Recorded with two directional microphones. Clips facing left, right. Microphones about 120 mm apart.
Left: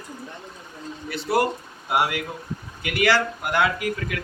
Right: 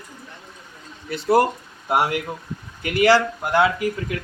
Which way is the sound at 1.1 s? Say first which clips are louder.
Right 5 dB; 35° right (ahead or behind).